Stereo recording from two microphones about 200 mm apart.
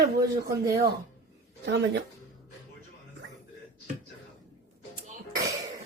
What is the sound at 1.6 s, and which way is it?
Speech, 60° right (ahead or behind).